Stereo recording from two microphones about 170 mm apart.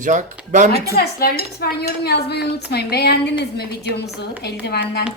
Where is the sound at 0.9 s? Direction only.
65° left (ahead or behind).